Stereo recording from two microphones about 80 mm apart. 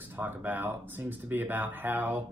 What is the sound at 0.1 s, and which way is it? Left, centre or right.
Speech, right.